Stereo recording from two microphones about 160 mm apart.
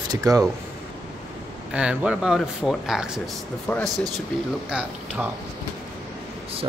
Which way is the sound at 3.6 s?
10° left (ahead or behind).